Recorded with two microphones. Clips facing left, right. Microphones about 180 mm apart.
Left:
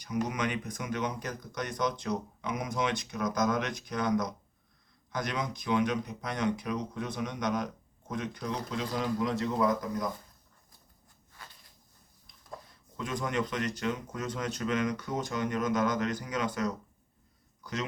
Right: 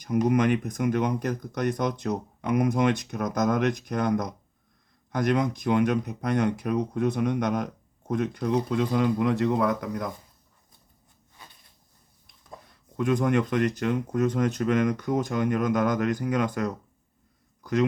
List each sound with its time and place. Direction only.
0.0 s speech: 55° right (ahead or behind)
13.0 s speech: 55° right (ahead or behind)